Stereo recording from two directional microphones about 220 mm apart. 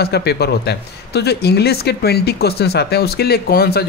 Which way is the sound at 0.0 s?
45° left (ahead or behind).